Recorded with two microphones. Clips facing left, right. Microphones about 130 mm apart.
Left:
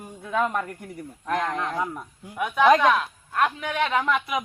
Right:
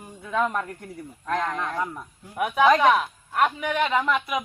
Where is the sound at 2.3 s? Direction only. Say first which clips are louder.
Left 1 dB; 5° right (ahead or behind).